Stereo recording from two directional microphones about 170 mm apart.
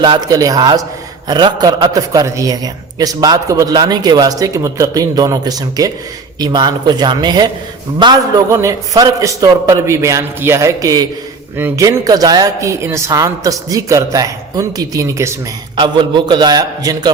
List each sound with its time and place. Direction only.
0.0 s a woman's voice: 25° right (ahead or behind)